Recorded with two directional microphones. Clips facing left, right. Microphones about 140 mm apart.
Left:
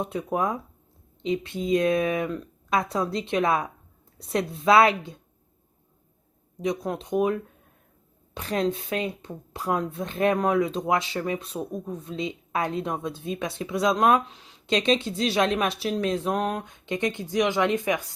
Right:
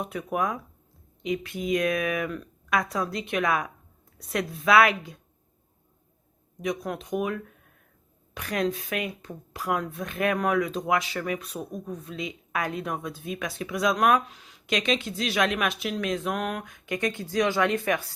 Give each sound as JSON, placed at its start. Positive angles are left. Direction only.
{"t": 0.0, "sound": "speech", "side_deg": 25}
{"t": 6.6, "sound": "speech", "side_deg": 25}